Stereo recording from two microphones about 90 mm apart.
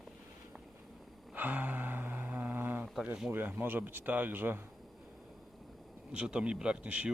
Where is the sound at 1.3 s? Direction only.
20° right (ahead or behind).